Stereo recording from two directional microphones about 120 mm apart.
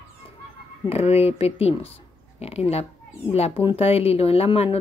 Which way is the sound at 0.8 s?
55° left (ahead or behind).